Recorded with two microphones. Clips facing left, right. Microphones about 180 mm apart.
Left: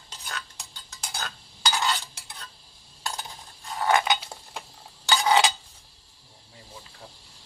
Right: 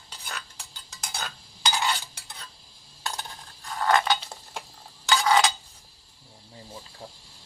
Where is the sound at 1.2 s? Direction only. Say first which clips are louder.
Even; centre (ahead or behind).